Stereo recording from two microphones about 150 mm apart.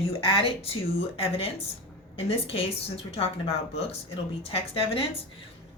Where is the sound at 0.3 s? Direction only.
35° left (ahead or behind).